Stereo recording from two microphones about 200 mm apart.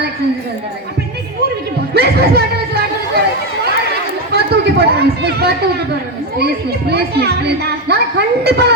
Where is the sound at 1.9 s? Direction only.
55° right (ahead or behind).